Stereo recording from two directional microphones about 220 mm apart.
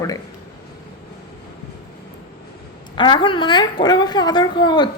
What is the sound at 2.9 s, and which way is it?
A woman's voice, 20° left (ahead or behind).